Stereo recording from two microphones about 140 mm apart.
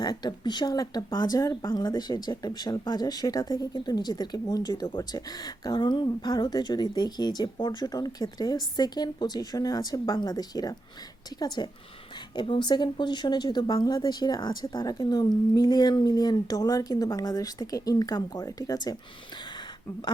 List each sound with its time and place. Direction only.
0.0 s speech: 30° left (ahead or behind)